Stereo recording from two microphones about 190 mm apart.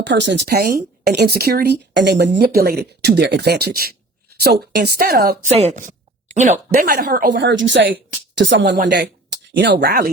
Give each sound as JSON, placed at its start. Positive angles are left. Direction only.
{"t": 0.0, "sound": "speech", "side_deg": -65}
{"t": 5.5, "sound": "a woman's voice", "side_deg": -35}
{"t": 7.3, "sound": "a woman's voice", "side_deg": -75}